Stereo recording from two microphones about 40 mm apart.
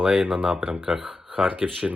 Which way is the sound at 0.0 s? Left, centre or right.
Right.